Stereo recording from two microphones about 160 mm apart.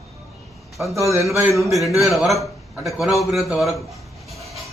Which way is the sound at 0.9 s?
20° right (ahead or behind).